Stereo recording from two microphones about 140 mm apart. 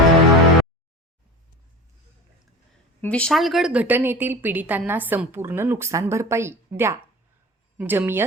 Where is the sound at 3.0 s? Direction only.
10° left (ahead or behind).